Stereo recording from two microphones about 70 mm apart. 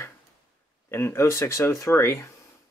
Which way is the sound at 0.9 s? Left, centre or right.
Left.